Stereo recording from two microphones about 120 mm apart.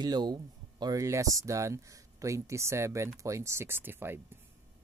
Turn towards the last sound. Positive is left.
turn(degrees=-20)  # may be behind; listen again after turning